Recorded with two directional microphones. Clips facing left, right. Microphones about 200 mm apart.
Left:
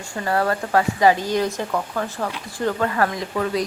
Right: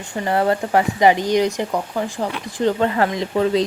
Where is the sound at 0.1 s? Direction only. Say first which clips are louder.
Right 3 dB; 20° right (ahead or behind).